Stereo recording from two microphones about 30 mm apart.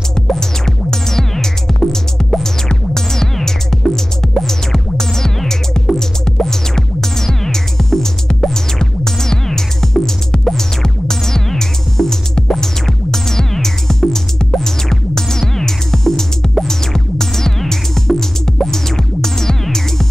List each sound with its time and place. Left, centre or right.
0.1 s music: centre